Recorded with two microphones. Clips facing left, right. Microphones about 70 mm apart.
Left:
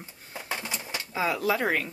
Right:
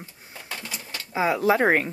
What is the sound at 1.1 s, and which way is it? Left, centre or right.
Speech, right.